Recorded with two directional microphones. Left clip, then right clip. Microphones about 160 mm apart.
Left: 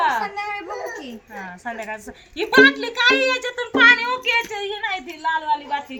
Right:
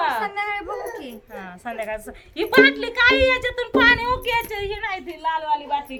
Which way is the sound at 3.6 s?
85° right.